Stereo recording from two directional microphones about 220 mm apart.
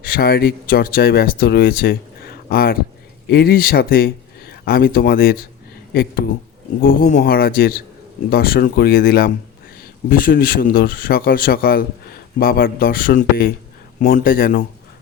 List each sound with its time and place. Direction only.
0.0 s speech: 45° left (ahead or behind)
6.8 s speech: 40° left (ahead or behind)